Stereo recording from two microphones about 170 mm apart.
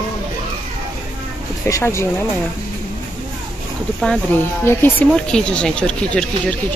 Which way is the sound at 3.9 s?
10° left (ahead or behind).